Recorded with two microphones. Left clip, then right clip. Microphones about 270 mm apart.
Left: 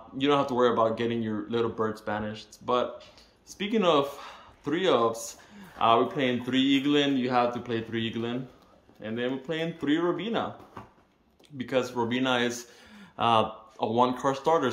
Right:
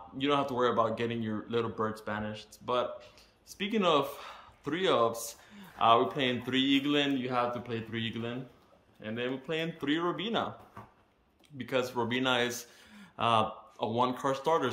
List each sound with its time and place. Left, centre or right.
0.2 s speech: centre
11.5 s speech: centre